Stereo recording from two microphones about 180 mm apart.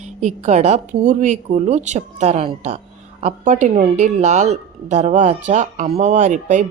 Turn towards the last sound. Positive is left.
turn(degrees=-45)  # may be behind; listen again after turning